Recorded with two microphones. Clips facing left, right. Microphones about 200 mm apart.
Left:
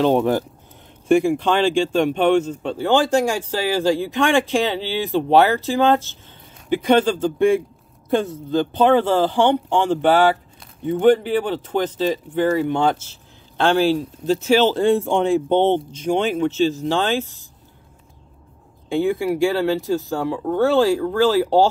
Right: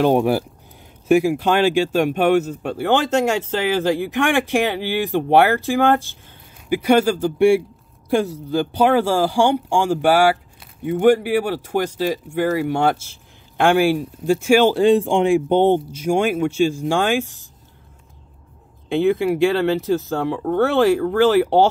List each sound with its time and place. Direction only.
0.0 s speech: 10° right (ahead or behind)
18.9 s speech: 20° right (ahead or behind)